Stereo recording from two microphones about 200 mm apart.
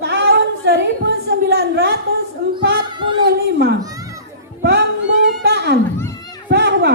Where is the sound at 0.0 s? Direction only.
60° right (ahead or behind).